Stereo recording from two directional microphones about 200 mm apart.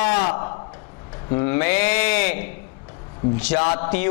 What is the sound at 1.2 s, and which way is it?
A man's voice, 20° left (ahead or behind).